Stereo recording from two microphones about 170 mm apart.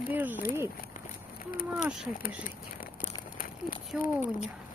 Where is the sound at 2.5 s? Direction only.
55° left (ahead or behind).